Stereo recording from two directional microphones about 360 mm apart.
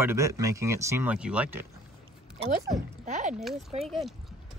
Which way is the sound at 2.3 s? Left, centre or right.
Centre.